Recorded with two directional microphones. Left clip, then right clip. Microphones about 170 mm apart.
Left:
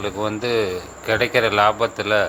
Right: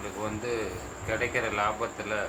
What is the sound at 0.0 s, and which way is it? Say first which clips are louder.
Speech: left 10 dB; 55° left (ahead or behind).